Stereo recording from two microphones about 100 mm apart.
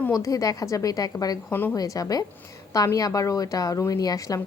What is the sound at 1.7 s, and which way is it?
A woman's voice, 35° left (ahead or behind).